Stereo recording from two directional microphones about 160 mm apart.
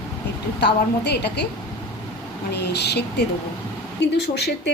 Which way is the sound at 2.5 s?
90° left.